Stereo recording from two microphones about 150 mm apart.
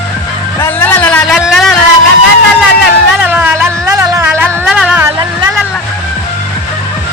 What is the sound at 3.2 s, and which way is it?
Music, 10° right (ahead or behind).